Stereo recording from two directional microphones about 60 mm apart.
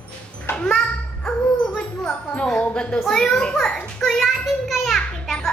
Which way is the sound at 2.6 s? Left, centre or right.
Centre.